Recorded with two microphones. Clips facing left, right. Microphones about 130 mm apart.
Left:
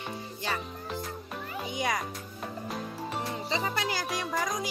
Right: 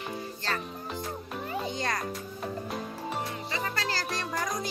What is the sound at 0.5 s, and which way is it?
Speech, 10° left (ahead or behind).